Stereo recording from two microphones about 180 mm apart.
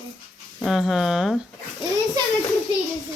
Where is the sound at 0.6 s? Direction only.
Centre (ahead or behind).